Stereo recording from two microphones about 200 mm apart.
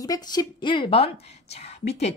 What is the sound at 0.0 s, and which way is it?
A woman's voice, 20° left (ahead or behind).